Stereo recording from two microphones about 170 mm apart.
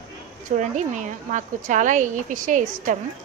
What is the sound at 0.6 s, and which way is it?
A woman's voice, 45° right (ahead or behind).